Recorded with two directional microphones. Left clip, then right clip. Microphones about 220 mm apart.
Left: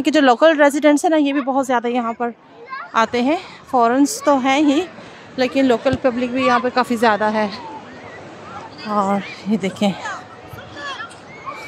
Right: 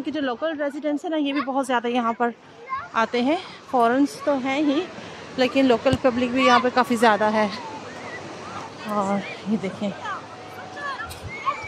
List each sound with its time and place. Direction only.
0.0 s a woman's voice: 30° left (ahead or behind); by 2.0 s 10° left (ahead or behind)
2.0 s speech: centre (ahead or behind)
2.9 s a woman's voice: 10° left (ahead or behind)
4.2 s speech: 20° left (ahead or behind)
5.3 s speech: 5° left (ahead or behind)
8.8 s a woman's voice: 10° left (ahead or behind)
9.6 s speech: 30° left (ahead or behind)